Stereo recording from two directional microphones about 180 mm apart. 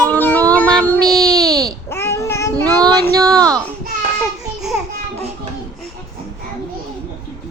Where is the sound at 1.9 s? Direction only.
15° left (ahead or behind).